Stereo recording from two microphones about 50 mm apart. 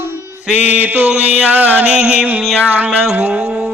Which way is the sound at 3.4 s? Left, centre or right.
Centre.